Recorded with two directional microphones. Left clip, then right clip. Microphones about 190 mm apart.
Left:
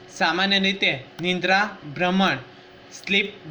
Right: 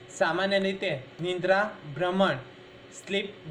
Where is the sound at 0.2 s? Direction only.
50° left (ahead or behind).